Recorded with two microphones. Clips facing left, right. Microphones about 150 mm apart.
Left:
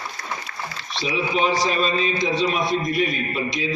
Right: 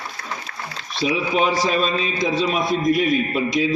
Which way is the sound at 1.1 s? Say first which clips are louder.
Right 1 dB; 50° right (ahead or behind).